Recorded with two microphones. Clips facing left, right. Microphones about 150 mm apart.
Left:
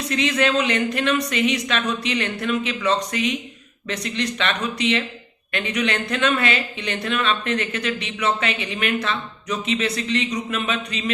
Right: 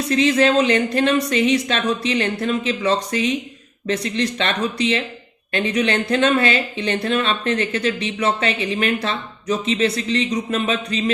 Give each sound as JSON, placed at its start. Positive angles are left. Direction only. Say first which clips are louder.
{"t": 0.1, "sound": "speech", "louder": "right 5 dB", "side_deg": -35}